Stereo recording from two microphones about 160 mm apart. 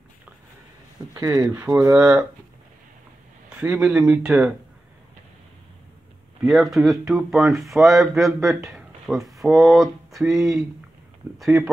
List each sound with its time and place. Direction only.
1.1 s speech: 20° right (ahead or behind)
3.4 s speech: 5° right (ahead or behind)
6.4 s speech: centre (ahead or behind)